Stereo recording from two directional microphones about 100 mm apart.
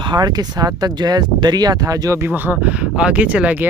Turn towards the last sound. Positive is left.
turn(degrees=-15)  # may be behind; listen again after turning